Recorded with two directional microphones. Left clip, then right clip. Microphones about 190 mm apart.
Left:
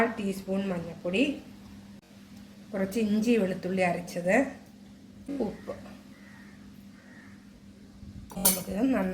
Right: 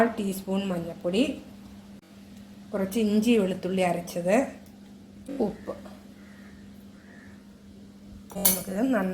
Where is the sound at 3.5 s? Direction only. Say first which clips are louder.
Right 2 dB; 20° right (ahead or behind).